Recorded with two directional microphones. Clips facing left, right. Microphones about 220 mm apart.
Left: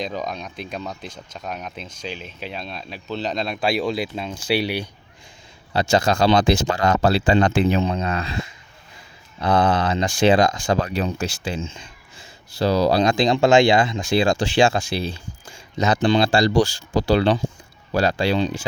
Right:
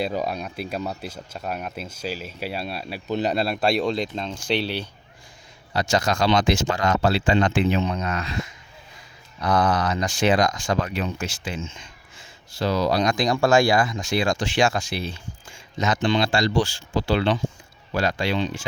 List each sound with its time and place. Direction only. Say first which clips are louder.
0.0 s speech: right 2 dB; 10° right (ahead or behind); by 4.9 s 10° left (ahead or behind)
5.7 s speech: left 4 dB; 30° left (ahead or behind)